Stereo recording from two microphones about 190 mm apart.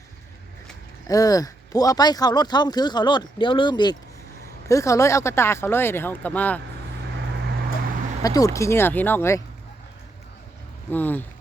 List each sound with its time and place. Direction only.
1.0 s speech: 20° left (ahead or behind)
8.2 s speech: 20° left (ahead or behind)
10.9 s speech: 10° left (ahead or behind)